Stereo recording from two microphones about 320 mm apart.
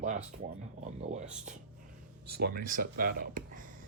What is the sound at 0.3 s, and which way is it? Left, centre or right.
Speech, right.